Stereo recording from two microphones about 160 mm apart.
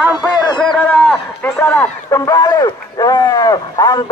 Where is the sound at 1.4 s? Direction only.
15° left (ahead or behind).